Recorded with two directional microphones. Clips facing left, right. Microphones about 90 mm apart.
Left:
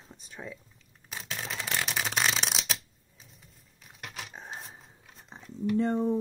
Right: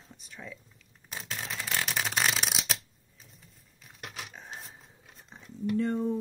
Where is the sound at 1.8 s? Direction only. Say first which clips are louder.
Even; centre (ahead or behind).